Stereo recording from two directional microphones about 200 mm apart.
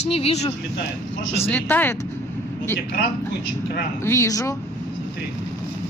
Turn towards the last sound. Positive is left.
turn(degrees=15)  # may be behind; listen again after turning